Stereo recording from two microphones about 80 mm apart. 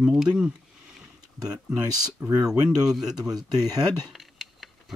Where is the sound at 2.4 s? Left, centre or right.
Centre.